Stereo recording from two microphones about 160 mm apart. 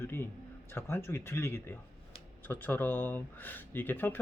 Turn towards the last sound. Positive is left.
turn(degrees=10)  # may be behind; listen again after turning